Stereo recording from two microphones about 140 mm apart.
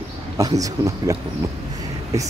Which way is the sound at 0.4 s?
25° right (ahead or behind).